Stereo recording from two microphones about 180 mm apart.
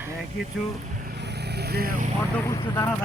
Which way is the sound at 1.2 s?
70° right (ahead or behind).